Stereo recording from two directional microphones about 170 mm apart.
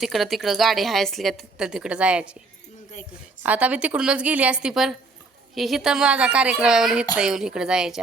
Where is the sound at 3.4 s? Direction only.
10° right (ahead or behind).